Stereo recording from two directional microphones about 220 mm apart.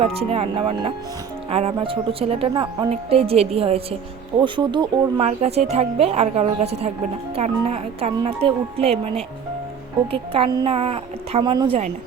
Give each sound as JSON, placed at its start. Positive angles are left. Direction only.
{"t": 0.0, "sound": "speech", "side_deg": -25}